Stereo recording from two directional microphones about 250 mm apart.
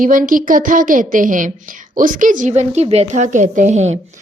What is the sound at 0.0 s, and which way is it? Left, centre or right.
A woman's voice, right.